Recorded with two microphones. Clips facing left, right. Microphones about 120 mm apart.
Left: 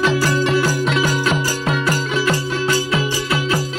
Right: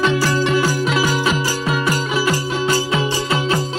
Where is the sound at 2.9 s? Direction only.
25° right (ahead or behind).